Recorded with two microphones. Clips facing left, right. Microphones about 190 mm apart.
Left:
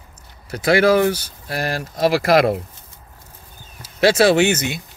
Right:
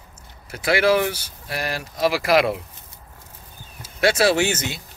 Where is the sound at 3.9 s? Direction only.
30° left (ahead or behind).